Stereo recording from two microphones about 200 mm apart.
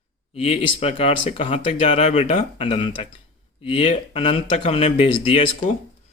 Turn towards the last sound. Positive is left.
turn(degrees=25)  # may be behind; listen again after turning